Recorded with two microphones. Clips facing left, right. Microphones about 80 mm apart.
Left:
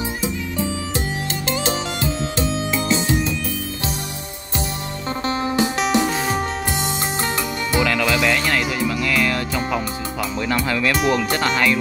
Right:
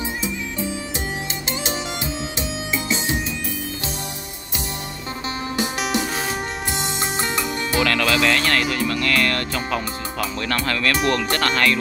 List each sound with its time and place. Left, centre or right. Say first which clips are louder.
1.5 s music: left 4 dB; right
5.4 s music: left 4 dB; left
7.2 s music: left 1 dB; left
7.8 s music: even; centre
10.4 s speech: left 2 dB; centre